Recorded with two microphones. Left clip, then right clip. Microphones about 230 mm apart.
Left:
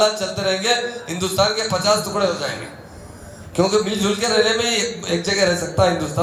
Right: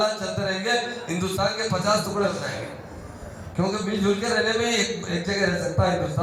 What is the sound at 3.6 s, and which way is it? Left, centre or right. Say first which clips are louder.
A man's voice: left 8 dB; left.